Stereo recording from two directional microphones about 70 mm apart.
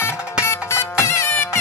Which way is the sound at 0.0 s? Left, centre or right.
Left.